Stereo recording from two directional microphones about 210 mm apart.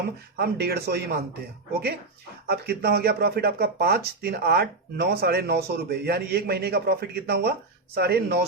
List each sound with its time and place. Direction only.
0.3 s speech: 50° right (ahead or behind)
2.5 s speech: 50° right (ahead or behind)